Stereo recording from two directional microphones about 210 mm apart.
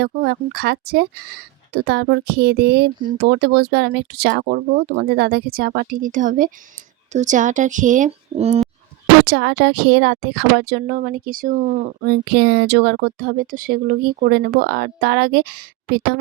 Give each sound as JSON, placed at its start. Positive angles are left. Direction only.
{"t": 0.0, "sound": "a woman's voice", "side_deg": -50}
{"t": 9.2, "sound": "a woman's voice", "side_deg": -60}